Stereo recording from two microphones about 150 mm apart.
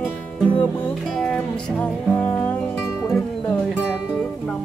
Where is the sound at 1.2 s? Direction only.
5° left (ahead or behind).